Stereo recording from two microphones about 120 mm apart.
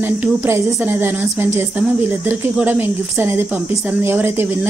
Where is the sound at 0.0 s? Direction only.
20° right (ahead or behind).